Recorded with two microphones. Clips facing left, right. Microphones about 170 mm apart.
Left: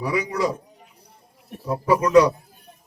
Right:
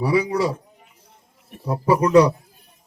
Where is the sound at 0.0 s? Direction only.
30° right (ahead or behind).